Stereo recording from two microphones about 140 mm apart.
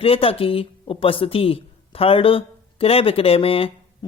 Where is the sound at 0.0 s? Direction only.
40° left (ahead or behind).